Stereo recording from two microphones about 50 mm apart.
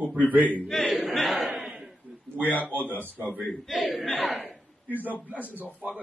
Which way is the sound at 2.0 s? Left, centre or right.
Right.